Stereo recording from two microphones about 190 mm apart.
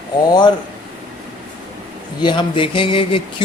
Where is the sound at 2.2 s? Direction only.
25° left (ahead or behind).